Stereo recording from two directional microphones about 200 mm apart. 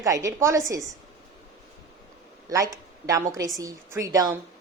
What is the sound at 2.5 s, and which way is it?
A woman's voice, 15° right (ahead or behind).